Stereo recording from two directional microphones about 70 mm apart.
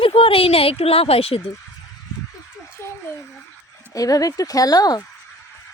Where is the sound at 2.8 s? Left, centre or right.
Left.